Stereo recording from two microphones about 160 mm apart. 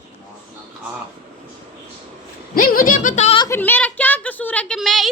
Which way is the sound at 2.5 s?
65° left (ahead or behind).